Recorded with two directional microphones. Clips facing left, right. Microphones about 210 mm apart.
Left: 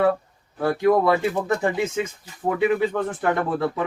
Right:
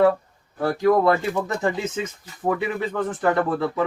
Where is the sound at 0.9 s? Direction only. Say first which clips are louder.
Even; 10° left (ahead or behind).